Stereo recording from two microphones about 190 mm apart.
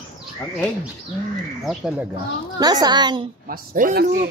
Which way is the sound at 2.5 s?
20° right (ahead or behind).